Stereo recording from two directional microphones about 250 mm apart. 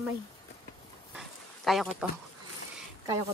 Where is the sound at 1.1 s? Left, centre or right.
Centre.